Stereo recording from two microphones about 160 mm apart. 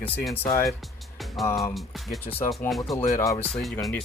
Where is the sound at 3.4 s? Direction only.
5° left (ahead or behind).